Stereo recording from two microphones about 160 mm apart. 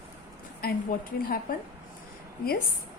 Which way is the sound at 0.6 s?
70° left (ahead or behind).